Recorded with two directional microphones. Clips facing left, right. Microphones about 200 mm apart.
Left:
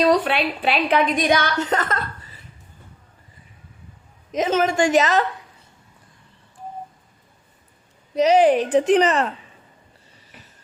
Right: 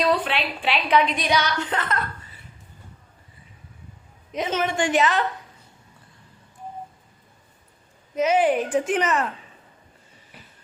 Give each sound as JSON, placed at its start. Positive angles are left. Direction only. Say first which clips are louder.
{"t": 0.0, "sound": "a woman's voice", "louder": "left 5 dB", "side_deg": 45}
{"t": 4.3, "sound": "a woman's voice", "louder": "left 5 dB", "side_deg": 45}
{"t": 8.1, "sound": "speech", "louder": "left 5 dB", "side_deg": 35}